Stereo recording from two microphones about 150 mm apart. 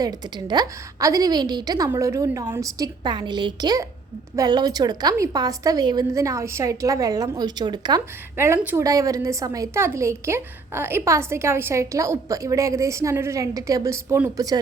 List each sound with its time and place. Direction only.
0.0 s a woman's voice: 25° right (ahead or behind)
8.4 s a woman's voice: 15° right (ahead or behind)